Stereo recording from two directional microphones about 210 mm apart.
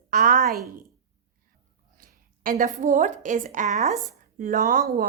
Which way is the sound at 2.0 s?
35° right (ahead or behind).